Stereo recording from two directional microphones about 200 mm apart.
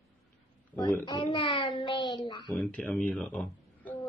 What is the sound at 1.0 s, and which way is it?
A child's voice, 25° left (ahead or behind).